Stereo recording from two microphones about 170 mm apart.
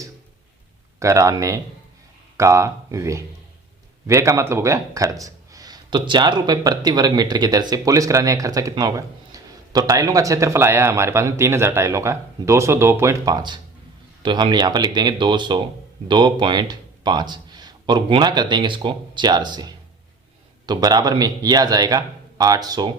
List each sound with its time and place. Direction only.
0.9 s speech: 20° right (ahead or behind)